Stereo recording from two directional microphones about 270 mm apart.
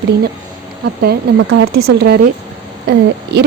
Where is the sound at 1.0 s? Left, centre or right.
Right.